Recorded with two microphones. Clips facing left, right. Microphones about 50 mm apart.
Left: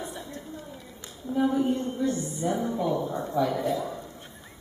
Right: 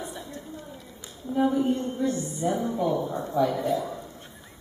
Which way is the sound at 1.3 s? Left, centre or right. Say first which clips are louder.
Right 1 dB; centre.